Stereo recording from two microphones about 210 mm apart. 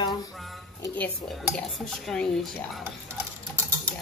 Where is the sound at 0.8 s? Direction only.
10° left (ahead or behind).